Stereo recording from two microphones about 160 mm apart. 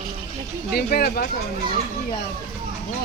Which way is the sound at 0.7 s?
70° left (ahead or behind).